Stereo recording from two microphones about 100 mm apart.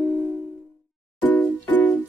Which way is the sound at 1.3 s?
20° left (ahead or behind).